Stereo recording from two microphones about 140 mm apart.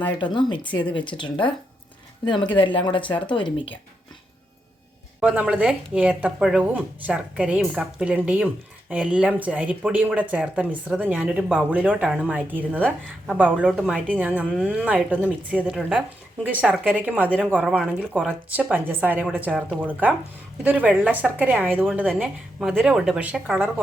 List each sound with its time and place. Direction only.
0.2 s speech: 35° left (ahead or behind)
5.2 s a woman's voice: 10° right (ahead or behind)
22.1 s a woman's voice: centre (ahead or behind)